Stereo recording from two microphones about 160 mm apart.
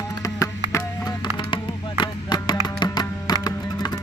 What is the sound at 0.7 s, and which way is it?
Music, 20° left (ahead or behind).